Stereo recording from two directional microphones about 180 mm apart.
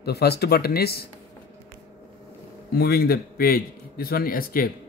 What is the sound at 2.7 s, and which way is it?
A man's voice, 55° left (ahead or behind).